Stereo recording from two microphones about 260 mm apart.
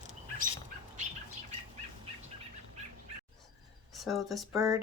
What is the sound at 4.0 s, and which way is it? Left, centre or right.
Speech, centre.